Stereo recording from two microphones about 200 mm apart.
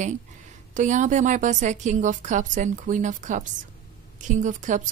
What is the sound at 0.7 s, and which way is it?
Speech, 40° right (ahead or behind).